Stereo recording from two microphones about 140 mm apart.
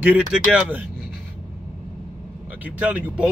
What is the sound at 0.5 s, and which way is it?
Speech, 10° right (ahead or behind).